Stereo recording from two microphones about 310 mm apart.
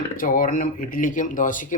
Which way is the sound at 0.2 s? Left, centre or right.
Left.